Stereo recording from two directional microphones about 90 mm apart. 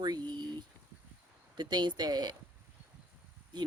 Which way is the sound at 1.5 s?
55° right (ahead or behind).